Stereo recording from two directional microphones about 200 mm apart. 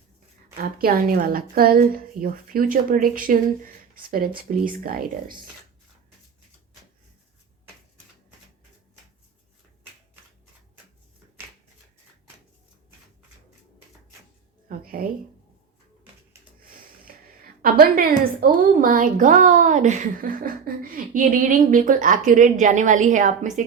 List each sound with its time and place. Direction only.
0.6 s a woman's voice: 50° right (ahead or behind)
14.7 s a sound: 50° right (ahead or behind)
16.8 s a woman's voice: 45° right (ahead or behind)